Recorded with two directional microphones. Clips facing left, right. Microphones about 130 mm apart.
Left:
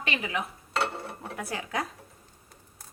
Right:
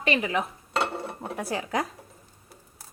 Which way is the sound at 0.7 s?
20° right (ahead or behind).